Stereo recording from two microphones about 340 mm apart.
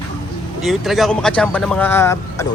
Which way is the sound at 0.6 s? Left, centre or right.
Centre.